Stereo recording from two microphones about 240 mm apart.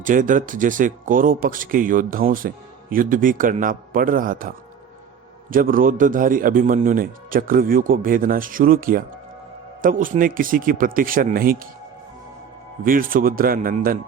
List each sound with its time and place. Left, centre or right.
0.0 s speech: right
12.8 s speech: right